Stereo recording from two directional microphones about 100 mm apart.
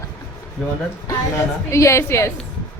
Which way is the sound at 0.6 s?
5° left (ahead or behind).